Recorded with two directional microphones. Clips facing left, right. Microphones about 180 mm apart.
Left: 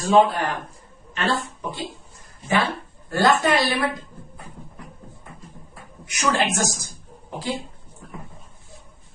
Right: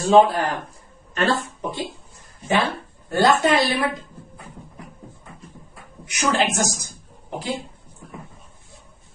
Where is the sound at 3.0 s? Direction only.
20° right (ahead or behind).